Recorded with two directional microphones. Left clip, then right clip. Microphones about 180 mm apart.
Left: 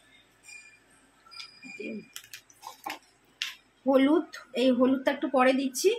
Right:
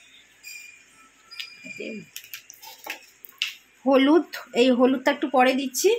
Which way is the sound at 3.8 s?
40° right (ahead or behind).